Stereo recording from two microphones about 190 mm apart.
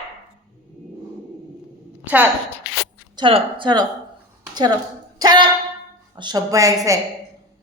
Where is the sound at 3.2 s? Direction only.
25° right (ahead or behind).